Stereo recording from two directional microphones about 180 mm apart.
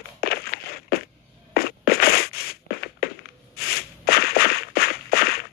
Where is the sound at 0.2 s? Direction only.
60° left (ahead or behind).